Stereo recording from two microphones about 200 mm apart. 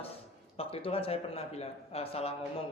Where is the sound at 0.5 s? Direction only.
30° left (ahead or behind).